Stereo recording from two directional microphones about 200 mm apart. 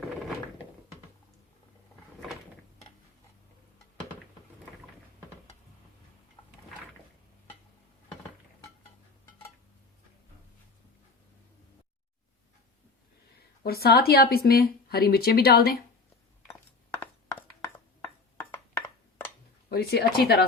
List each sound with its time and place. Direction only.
13.6 s speech: 50° left (ahead or behind)
16.5 s glass: 10° left (ahead or behind)
19.7 s speech: 50° left (ahead or behind)